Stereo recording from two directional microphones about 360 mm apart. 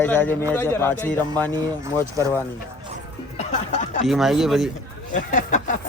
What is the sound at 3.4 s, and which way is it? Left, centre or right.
Speech, centre.